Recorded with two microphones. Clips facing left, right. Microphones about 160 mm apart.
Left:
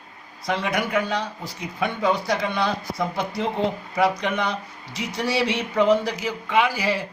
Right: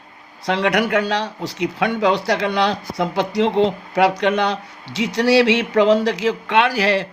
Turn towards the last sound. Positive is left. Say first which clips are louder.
# right 5 dB
turn(degrees=-90)